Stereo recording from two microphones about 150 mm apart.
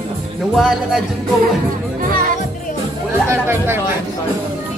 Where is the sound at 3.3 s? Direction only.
15° right (ahead or behind).